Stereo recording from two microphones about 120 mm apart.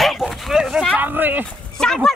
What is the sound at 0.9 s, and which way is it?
Speech, 15° right (ahead or behind).